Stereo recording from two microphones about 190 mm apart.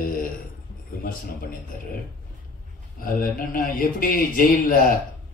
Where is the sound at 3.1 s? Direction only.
50° left (ahead or behind).